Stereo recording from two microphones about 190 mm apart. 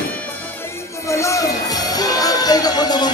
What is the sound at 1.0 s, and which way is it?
Music, 15° left (ahead or behind).